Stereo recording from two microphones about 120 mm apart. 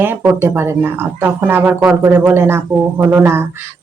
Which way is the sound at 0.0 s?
20° right (ahead or behind).